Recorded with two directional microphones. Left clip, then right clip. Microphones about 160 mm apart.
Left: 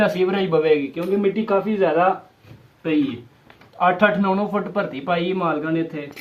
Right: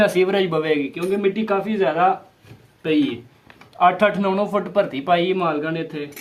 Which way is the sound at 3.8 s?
35° right (ahead or behind).